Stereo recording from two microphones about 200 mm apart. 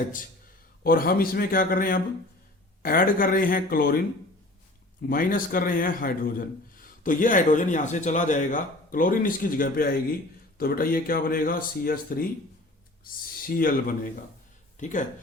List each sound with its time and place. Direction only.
0.9 s speech: 45° left (ahead or behind)
5.0 s speech: 45° left (ahead or behind)
13.4 s speech: 45° left (ahead or behind)